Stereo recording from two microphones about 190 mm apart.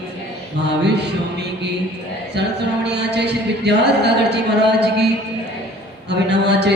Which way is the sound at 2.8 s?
65° right (ahead or behind).